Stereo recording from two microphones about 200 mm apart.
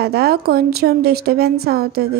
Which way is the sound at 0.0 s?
50° right (ahead or behind).